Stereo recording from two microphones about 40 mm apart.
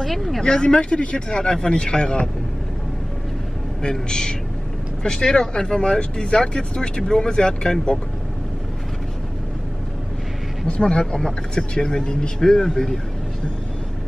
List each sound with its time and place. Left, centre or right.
0.0 s speech: centre
0.4 s speech: centre
4.1 s speech: centre
10.7 s speech: left